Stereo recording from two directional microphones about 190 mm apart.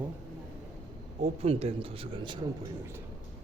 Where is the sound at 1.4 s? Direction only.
30° right (ahead or behind).